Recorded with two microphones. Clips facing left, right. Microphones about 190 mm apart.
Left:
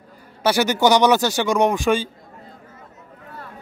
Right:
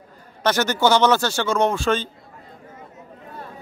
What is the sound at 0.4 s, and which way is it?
Speech, 10° left (ahead or behind).